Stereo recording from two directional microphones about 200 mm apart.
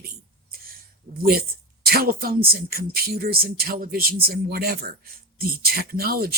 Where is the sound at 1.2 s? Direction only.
50° right (ahead or behind).